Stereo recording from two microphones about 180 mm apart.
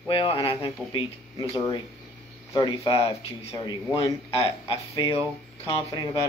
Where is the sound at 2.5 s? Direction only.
20° left (ahead or behind).